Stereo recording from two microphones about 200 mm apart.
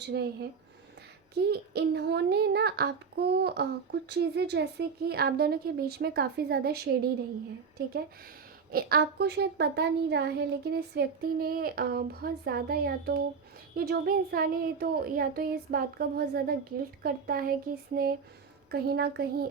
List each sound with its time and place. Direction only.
0.0 s speech: 55° right (ahead or behind)
8.7 s speech: 50° right (ahead or behind)